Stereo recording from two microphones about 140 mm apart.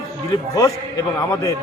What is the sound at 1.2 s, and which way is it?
Speech, 25° left (ahead or behind).